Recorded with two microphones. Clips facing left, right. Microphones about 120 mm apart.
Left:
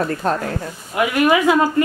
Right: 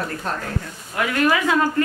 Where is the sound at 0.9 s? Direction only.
15° left (ahead or behind).